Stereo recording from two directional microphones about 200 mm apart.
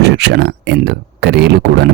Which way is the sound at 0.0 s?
60° right (ahead or behind).